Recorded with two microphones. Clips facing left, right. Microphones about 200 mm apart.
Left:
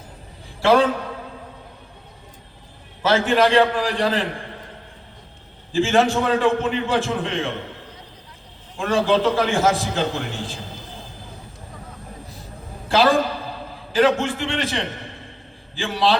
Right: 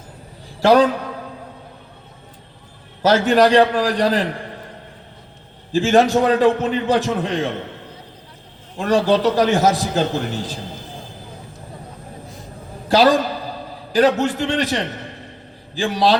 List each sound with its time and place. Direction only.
0.6 s a man's voice: 40° right (ahead or behind)
3.0 s a man's voice: 40° right (ahead or behind)
5.7 s a man's voice: 40° right (ahead or behind)
8.8 s a man's voice: 40° right (ahead or behind)
12.9 s a man's voice: 40° right (ahead or behind)